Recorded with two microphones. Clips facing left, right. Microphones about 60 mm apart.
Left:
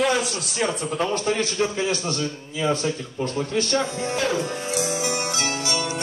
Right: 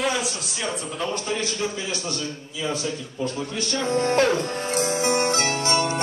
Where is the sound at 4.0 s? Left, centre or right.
Right.